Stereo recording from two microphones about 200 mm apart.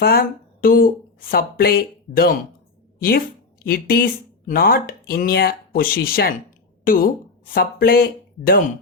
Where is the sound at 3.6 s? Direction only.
50° left (ahead or behind).